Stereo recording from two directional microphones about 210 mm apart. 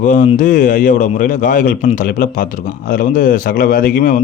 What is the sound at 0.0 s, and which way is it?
A man's voice, 35° left (ahead or behind).